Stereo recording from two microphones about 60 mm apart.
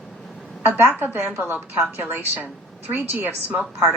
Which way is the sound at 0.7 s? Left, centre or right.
Right.